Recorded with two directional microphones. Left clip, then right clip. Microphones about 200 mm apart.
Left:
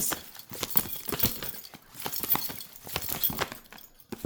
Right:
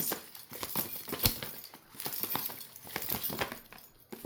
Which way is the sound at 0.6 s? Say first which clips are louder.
Left 5 dB; 25° left (ahead or behind).